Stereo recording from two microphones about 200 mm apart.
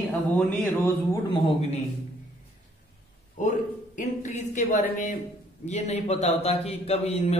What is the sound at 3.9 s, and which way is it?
A man's voice, 40° left (ahead or behind).